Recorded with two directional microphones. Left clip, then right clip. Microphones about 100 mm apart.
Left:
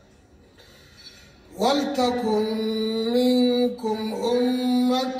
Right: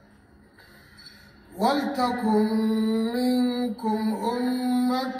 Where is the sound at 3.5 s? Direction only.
10° left (ahead or behind).